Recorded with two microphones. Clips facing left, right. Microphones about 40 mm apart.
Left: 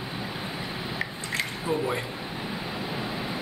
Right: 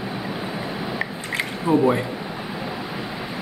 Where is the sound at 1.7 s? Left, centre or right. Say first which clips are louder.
Right 10 dB; centre.